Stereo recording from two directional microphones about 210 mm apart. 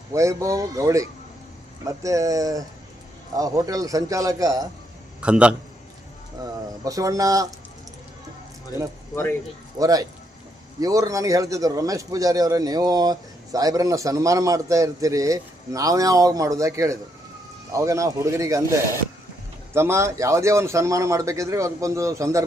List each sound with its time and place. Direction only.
0.1 s speech: 15° right (ahead or behind)
5.2 s a man's voice: 5° right (ahead or behind)
6.4 s speech: 15° right (ahead or behind)
9.7 s speech: 15° right (ahead or behind)